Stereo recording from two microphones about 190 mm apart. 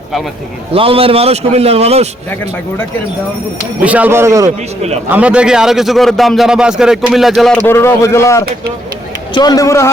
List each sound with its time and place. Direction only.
0.7 s a man's voice: 30° right (ahead or behind)
3.8 s speech: 10° right (ahead or behind)
4.4 s a man's voice: 35° right (ahead or behind)
5.1 s a man's voice: 5° right (ahead or behind)
7.7 s a man's voice: 15° left (ahead or behind)